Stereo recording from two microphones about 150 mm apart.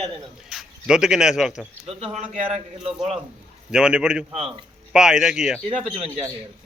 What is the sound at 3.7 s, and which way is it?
A man's voice, 5° right (ahead or behind).